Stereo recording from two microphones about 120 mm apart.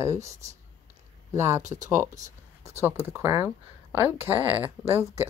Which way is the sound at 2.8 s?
20° right (ahead or behind).